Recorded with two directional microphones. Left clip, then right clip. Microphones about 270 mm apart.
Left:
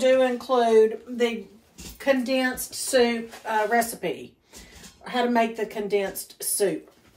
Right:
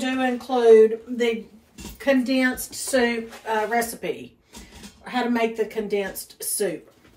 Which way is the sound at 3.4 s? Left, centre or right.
Centre.